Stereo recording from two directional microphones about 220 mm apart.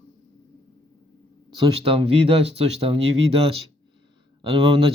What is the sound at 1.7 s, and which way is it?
Speech, 25° right (ahead or behind).